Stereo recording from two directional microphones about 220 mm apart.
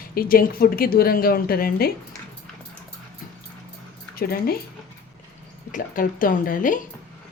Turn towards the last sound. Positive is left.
turn(degrees=35)  # may be behind; listen again after turning